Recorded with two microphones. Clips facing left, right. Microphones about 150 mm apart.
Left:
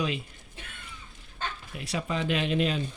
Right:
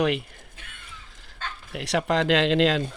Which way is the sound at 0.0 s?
65° right (ahead or behind).